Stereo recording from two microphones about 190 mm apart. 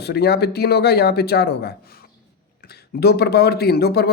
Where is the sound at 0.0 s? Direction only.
60° left (ahead or behind).